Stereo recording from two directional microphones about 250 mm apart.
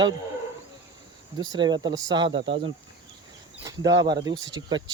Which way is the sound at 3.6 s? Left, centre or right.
Centre.